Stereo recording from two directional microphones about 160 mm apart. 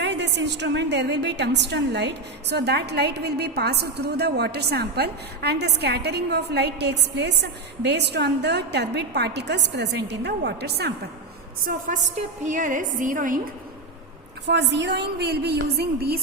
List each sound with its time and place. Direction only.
0.0 s a woman's voice: 90° right
11.6 s a woman's voice: 60° right (ahead or behind)
14.4 s a woman's voice: 90° right